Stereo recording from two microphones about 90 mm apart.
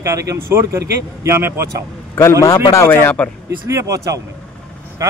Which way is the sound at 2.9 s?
20° left (ahead or behind).